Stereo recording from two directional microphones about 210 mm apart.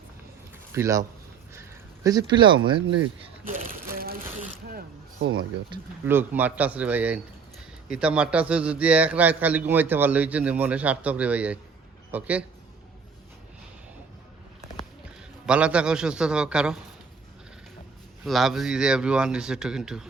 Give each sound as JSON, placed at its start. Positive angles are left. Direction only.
{"t": 0.7, "sound": "speech", "side_deg": -15}
{"t": 2.0, "sound": "speech", "side_deg": -20}
{"t": 3.4, "sound": "a sound", "side_deg": -40}
{"t": 6.1, "sound": "a man's voice", "side_deg": -10}
{"t": 15.4, "sound": "speech", "side_deg": -5}
{"t": 18.3, "sound": "speech", "side_deg": 0}